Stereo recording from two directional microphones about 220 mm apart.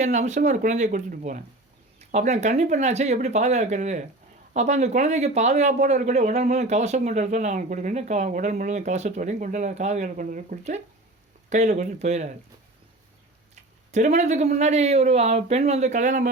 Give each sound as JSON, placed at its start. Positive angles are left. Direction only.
{"t": 0.0, "sound": "speech", "side_deg": -35}
{"t": 13.9, "sound": "speech", "side_deg": -30}